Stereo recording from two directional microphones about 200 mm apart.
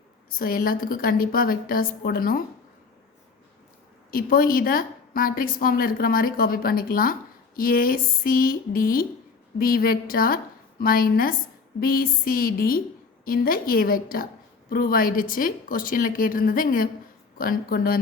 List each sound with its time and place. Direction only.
0.3 s a woman's voice: 45° left (ahead or behind)
4.1 s a woman's voice: 45° left (ahead or behind)